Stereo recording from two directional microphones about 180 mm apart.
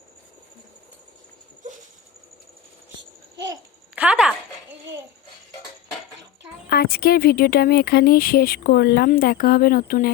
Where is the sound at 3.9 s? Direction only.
5° right (ahead or behind).